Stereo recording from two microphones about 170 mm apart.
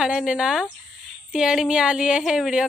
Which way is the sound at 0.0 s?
5° right (ahead or behind).